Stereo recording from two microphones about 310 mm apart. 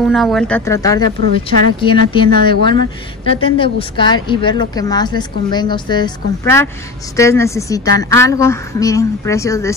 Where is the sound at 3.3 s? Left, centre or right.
Centre.